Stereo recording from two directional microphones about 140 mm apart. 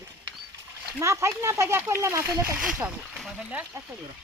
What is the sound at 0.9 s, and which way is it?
Speech, 20° right (ahead or behind).